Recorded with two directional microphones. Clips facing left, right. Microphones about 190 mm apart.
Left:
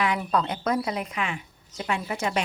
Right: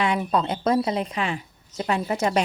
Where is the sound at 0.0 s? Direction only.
25° right (ahead or behind).